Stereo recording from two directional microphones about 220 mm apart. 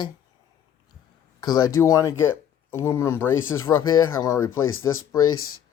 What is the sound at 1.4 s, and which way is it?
Speech, 15° left (ahead or behind).